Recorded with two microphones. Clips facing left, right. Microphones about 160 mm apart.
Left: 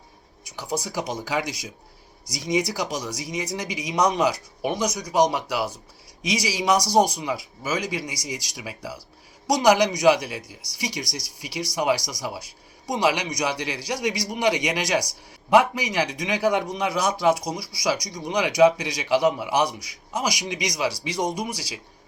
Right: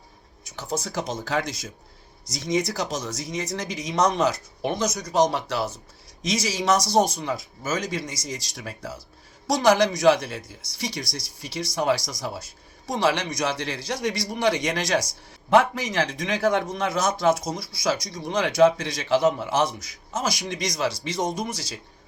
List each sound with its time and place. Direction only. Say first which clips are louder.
0.5 s a man's voice: left 1 dB; 10° left (ahead or behind)